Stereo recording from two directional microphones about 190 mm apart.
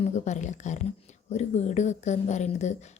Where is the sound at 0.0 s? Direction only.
40° left (ahead or behind).